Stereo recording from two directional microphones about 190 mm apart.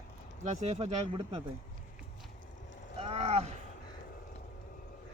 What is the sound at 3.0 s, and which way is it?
Speech, 35° right (ahead or behind).